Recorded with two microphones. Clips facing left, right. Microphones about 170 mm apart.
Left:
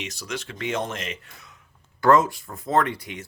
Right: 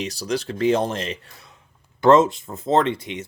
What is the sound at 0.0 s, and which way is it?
Speech, 35° right (ahead or behind).